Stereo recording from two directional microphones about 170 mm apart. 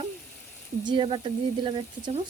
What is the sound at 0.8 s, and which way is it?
Speech, 30° right (ahead or behind).